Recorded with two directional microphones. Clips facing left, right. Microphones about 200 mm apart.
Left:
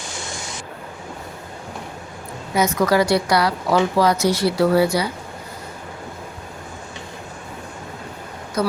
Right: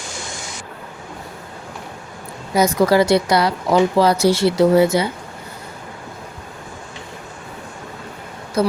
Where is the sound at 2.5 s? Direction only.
30° right (ahead or behind).